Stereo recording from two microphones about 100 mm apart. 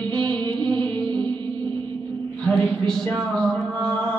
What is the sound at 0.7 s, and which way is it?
Music, 15° left (ahead or behind).